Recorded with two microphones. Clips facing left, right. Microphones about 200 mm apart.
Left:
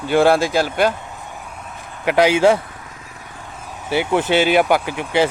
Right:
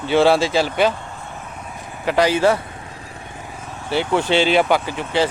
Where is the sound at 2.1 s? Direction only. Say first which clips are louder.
Left 2 dB; 15° left (ahead or behind).